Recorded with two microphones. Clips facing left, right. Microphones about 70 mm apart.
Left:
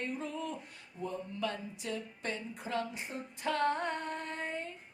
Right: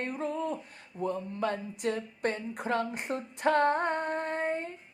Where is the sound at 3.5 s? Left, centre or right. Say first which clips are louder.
Right 5 dB; right.